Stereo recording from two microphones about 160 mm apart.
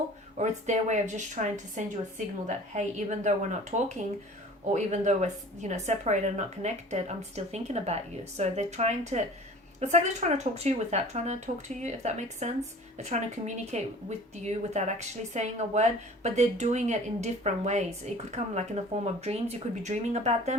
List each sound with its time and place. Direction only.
0.3 s a woman's voice: 45° right (ahead or behind)